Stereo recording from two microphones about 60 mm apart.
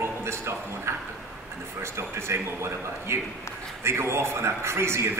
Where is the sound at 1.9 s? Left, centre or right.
Right.